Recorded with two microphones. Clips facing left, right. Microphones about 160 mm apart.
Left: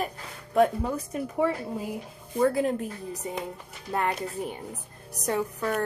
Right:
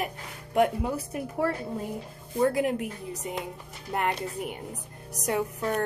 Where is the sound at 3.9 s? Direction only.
20° right (ahead or behind).